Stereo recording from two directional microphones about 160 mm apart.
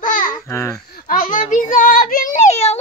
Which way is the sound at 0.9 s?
60° left (ahead or behind).